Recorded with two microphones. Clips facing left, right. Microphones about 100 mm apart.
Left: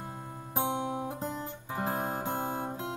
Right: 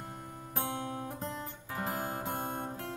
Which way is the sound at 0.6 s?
20° left (ahead or behind).